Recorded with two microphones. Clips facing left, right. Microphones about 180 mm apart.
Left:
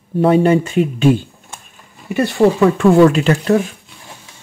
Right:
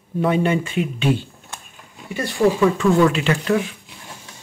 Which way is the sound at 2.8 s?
45° left (ahead or behind).